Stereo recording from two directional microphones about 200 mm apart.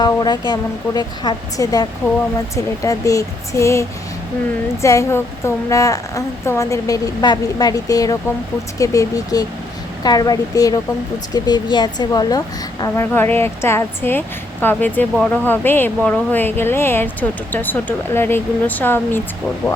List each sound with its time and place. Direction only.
0.0 s a woman's voice: 20° left (ahead or behind)